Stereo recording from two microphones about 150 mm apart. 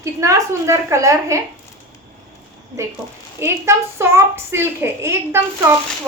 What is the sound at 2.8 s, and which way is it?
A woman's voice, 20° right (ahead or behind).